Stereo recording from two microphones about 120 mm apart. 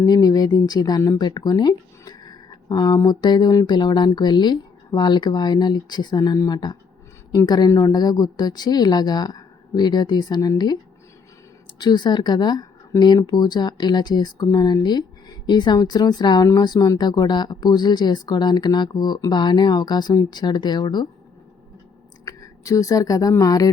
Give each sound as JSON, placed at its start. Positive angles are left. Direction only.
{"t": 0.0, "sound": "speech", "side_deg": 30}
{"t": 11.8, "sound": "speech", "side_deg": 35}
{"t": 22.3, "sound": "a woman's voice", "side_deg": 30}